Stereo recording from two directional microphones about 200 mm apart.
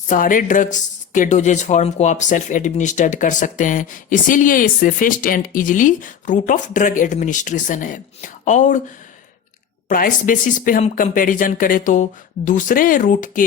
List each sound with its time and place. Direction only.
0.1 s speech: 40° left (ahead or behind)
9.9 s speech: 45° left (ahead or behind)